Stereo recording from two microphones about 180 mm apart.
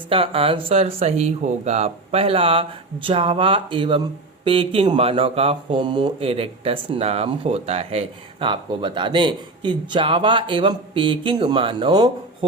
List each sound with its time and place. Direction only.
0.1 s speech: 30° right (ahead or behind)